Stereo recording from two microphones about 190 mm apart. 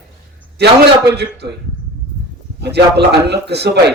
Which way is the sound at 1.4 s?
60° right (ahead or behind).